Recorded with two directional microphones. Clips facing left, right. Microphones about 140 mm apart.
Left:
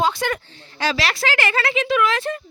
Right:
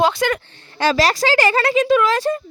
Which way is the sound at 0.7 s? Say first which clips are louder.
Right 6 dB; 45° right (ahead or behind).